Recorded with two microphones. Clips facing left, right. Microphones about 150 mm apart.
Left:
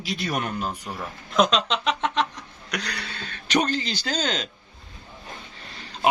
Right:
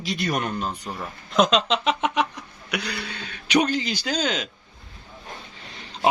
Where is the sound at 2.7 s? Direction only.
10° right (ahead or behind).